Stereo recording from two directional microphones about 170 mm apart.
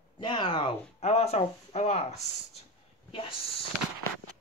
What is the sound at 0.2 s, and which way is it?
Speech, 30° left (ahead or behind).